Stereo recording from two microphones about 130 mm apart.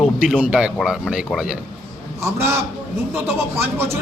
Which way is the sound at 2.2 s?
20° right (ahead or behind).